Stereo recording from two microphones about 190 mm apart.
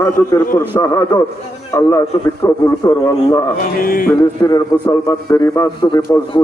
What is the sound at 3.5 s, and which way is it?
Mantra, 50° left (ahead or behind).